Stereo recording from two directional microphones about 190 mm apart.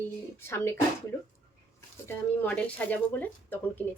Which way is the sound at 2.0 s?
10° left (ahead or behind).